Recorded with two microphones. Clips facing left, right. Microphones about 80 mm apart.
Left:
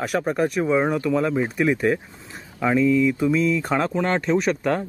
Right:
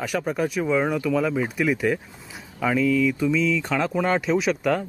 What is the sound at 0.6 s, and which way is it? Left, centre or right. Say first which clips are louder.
Speech: left 1 dB; centre.